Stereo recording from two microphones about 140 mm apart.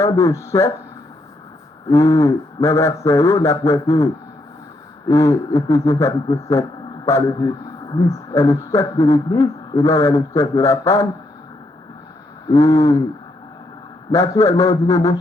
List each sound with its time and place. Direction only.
0.0 s speech: 20° left (ahead or behind)
1.9 s speech: 20° left (ahead or behind)
12.5 s speech: 25° left (ahead or behind)
14.1 s speech: 25° left (ahead or behind)